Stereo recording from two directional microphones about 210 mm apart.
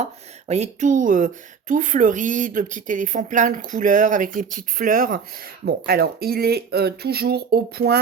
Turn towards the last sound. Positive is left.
turn(degrees=-50)  # may be behind; listen again after turning